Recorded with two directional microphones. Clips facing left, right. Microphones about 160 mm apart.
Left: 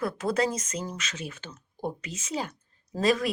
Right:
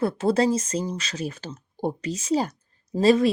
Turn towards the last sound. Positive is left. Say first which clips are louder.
# right 7 dB
turn(degrees=-30)  # may be behind; listen again after turning